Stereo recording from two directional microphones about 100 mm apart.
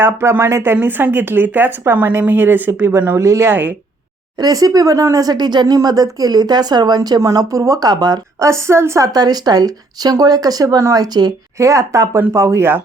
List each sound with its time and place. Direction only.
0.0 s speech: 25° right (ahead or behind)
3.5 s speech: 20° right (ahead or behind)
4.4 s speech: 40° right (ahead or behind)
8.4 s speech: 30° right (ahead or behind)
9.1 s speech: 40° right (ahead or behind); by 12.8 s 25° right (ahead or behind)